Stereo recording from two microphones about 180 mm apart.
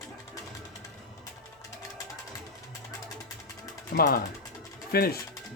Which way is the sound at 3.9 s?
55° left (ahead or behind).